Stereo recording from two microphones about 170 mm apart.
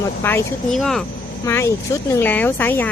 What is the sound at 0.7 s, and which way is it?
Speech, centre (ahead or behind).